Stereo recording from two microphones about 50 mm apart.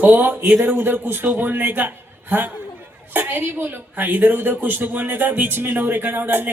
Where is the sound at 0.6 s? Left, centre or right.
Right.